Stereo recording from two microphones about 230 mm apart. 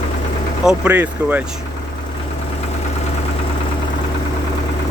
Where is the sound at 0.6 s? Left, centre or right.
Centre.